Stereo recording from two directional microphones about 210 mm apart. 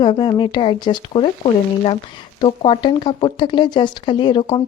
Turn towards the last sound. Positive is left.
turn(degrees=20)  # may be behind; listen again after turning